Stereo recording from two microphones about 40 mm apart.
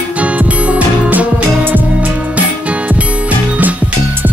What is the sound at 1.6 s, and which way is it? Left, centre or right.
Music, right.